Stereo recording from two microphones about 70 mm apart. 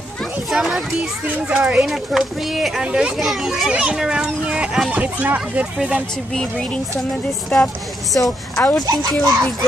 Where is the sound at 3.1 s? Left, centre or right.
Centre.